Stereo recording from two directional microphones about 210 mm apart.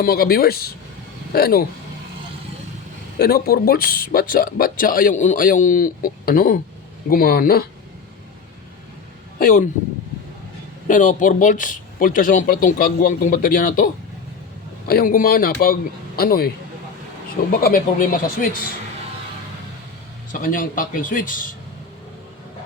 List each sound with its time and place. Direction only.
0.0 s speech: 45° left (ahead or behind)
3.2 s speech: 50° left (ahead or behind)
9.4 s speech: 40° left (ahead or behind)
10.8 s speech: 40° left (ahead or behind)
17.5 s speech: 45° left (ahead or behind)
20.3 s speech: 40° left (ahead or behind)